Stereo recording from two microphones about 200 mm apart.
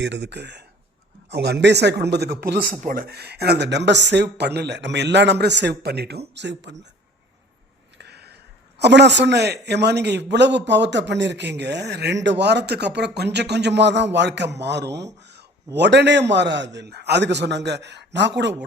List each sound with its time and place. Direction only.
0.0 s a man's voice: 60° right (ahead or behind)
7.9 s a sound: 55° right (ahead or behind)
8.8 s a man's voice: 60° right (ahead or behind)